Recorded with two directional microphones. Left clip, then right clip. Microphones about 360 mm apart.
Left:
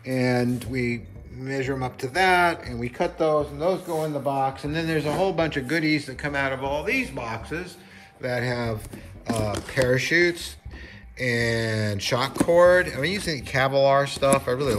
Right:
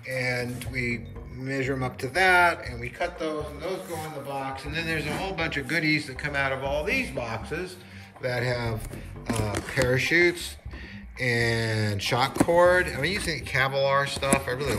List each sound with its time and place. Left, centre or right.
0.1 s speech: centre